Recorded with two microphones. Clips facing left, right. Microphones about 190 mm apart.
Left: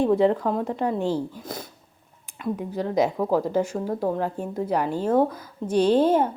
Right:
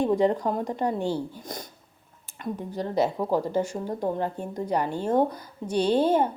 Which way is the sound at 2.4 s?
10° left (ahead or behind).